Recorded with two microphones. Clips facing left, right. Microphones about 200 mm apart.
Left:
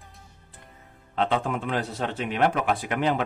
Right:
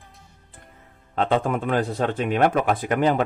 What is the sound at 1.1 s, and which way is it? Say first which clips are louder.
A man's voice: right 4 dB; 45° right (ahead or behind).